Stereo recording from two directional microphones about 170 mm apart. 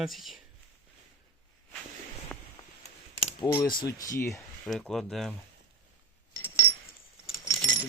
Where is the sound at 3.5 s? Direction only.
25° left (ahead or behind).